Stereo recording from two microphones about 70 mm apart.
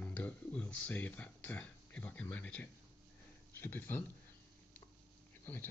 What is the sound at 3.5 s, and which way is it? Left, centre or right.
Speech, left.